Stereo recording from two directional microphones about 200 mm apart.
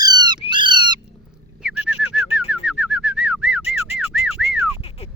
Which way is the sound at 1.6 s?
5° right (ahead or behind).